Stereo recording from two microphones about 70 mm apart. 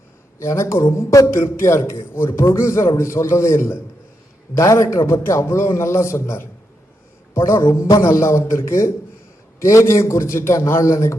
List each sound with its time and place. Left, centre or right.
0.3 s a man's voice: left